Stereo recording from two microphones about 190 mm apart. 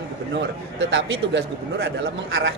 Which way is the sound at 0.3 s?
80° right.